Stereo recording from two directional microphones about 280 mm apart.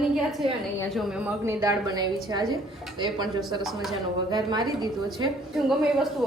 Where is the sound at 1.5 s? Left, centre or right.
Centre.